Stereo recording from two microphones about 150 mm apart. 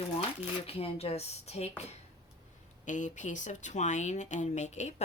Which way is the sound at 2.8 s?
55° left (ahead or behind).